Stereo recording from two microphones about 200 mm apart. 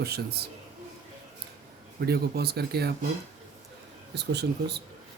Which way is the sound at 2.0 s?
50° right (ahead or behind).